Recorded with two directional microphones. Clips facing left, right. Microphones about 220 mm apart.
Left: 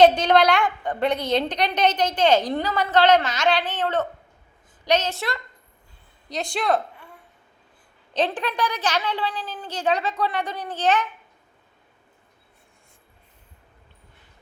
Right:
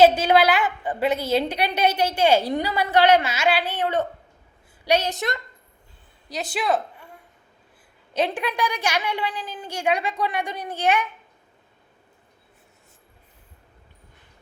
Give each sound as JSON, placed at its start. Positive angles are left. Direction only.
{"t": 0.0, "sound": "a woman's voice", "side_deg": -5}
{"t": 6.3, "sound": "speech", "side_deg": -5}
{"t": 8.1, "sound": "a woman's voice", "side_deg": -10}